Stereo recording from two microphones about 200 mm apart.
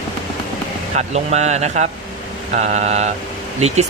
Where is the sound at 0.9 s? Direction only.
35° right (ahead or behind).